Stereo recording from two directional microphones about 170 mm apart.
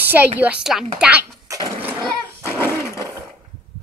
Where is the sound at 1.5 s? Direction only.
25° right (ahead or behind).